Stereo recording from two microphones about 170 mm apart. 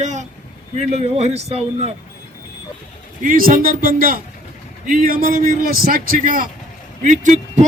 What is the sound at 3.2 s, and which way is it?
A man's voice, 55° right (ahead or behind).